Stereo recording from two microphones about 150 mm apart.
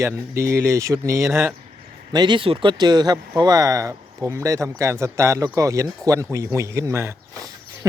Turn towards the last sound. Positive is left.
turn(degrees=-20)  # may be behind; listen again after turning